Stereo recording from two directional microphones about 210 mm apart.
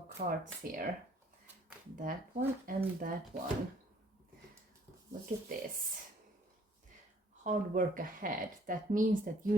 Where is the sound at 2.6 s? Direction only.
40° right (ahead or behind).